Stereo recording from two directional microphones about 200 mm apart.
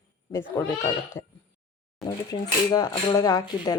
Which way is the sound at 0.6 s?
10° left (ahead or behind).